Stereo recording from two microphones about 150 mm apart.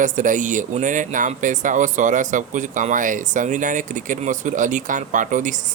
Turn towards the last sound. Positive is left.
turn(degrees=-55)  # may be behind; listen again after turning